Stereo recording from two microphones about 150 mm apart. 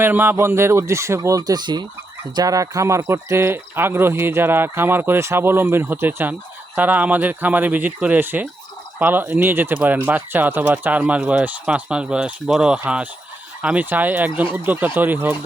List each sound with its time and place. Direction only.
0.0 s speech: 15° right (ahead or behind)